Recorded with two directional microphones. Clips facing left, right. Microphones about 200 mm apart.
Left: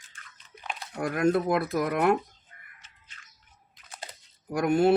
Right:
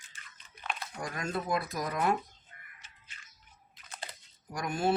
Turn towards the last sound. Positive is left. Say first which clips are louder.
# left 9 dB
turn(degrees=65)  # may be behind; listen again after turning